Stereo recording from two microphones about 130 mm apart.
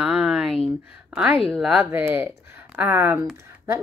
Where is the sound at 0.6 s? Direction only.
15° right (ahead or behind).